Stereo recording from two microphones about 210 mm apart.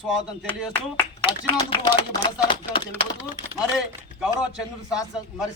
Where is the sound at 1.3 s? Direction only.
20° left (ahead or behind).